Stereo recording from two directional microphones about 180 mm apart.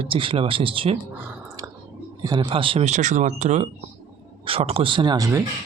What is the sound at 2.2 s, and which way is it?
Speech, 20° right (ahead or behind).